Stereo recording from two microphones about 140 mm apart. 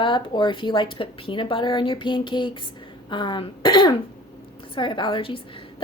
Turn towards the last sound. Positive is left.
turn(degrees=40)  # may be behind; listen again after turning